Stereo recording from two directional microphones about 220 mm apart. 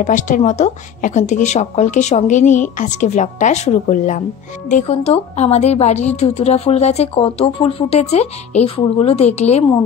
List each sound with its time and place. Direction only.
0.0 s a woman's voice: 35° left (ahead or behind)